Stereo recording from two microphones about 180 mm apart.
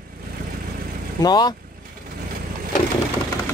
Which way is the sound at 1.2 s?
25° left (ahead or behind).